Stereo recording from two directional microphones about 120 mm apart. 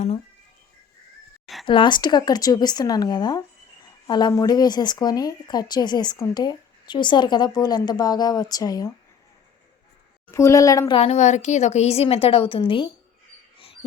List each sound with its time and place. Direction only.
1.6 s speech: 45° left (ahead or behind)
10.2 s a woman's voice: 25° left (ahead or behind)
10.9 s a woman's voice: 60° left (ahead or behind); by 12.9 s 45° left (ahead or behind)